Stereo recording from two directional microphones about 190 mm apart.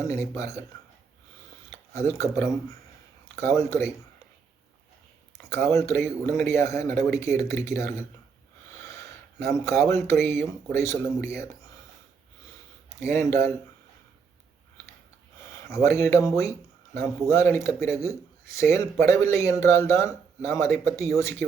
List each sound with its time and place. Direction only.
0.0 s speech: 15° left (ahead or behind)
1.9 s speech: 15° left (ahead or behind)
3.5 s speech: 15° left (ahead or behind)
5.6 s speech: 15° left (ahead or behind)
9.4 s speech: 15° left (ahead or behind)
13.0 s speech: 15° left (ahead or behind)
15.5 s speech: 15° left (ahead or behind)